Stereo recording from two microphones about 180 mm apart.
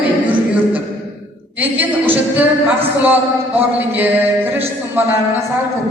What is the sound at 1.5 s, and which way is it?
A man's voice, 10° right (ahead or behind).